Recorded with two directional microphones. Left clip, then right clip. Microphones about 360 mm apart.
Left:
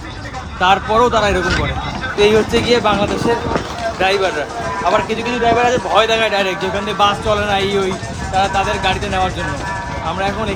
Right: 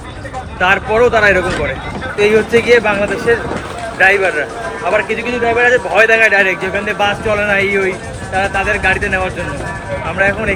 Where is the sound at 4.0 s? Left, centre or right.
Centre.